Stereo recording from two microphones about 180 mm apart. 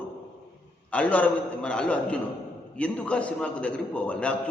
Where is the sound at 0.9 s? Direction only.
5° left (ahead or behind).